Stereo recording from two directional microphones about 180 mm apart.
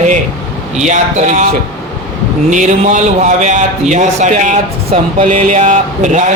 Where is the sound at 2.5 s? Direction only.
45° right (ahead or behind).